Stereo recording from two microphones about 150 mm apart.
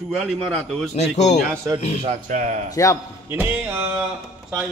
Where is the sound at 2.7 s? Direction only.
20° left (ahead or behind).